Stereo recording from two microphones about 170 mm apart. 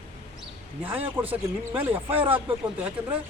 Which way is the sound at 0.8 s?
10° right (ahead or behind).